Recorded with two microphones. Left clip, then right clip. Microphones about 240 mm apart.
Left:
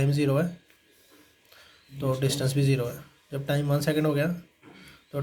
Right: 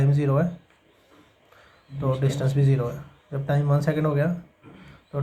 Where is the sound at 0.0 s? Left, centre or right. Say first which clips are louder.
Right 1 dB; left.